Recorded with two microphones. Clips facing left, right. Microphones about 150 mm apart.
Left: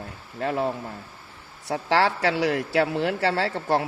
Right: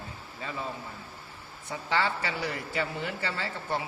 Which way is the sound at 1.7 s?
85° left.